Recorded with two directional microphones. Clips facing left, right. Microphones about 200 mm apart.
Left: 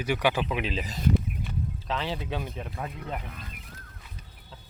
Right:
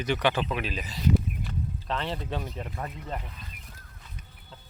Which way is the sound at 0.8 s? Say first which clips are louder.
Left 1 dB; 45° left (ahead or behind).